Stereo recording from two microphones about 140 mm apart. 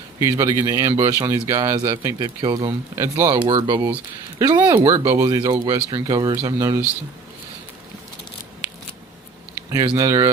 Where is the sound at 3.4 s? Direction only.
40° right (ahead or behind).